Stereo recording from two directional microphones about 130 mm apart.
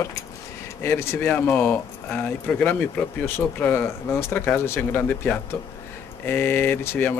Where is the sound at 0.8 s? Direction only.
20° left (ahead or behind).